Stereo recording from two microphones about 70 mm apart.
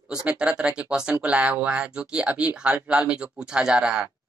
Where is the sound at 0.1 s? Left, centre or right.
Centre.